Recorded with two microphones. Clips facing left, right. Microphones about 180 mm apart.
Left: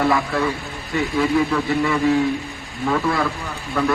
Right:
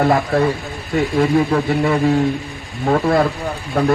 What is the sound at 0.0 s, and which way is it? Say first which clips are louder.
A man's voice: right 4 dB; 40° right (ahead or behind).